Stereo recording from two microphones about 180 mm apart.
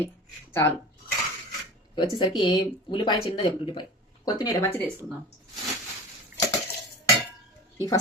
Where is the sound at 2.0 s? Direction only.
25° left (ahead or behind).